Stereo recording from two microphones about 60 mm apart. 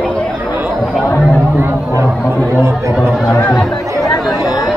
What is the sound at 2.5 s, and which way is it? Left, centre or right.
Chatter, right.